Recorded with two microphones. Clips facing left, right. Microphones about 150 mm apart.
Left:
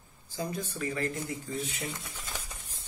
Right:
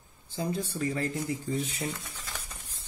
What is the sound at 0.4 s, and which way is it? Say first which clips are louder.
Speech: right 3 dB; 30° right (ahead or behind).